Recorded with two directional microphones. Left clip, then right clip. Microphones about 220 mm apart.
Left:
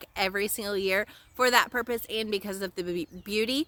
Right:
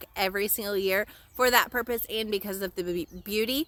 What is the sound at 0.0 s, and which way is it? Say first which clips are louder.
Speech: even; centre (ahead or behind).